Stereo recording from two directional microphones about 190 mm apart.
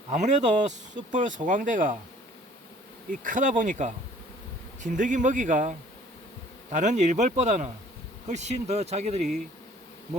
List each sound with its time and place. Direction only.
0.1 s speech: 40° right (ahead or behind)
3.1 s speech: 45° right (ahead or behind)